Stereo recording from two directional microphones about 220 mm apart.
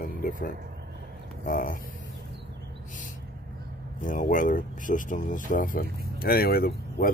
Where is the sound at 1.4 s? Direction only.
40° left (ahead or behind).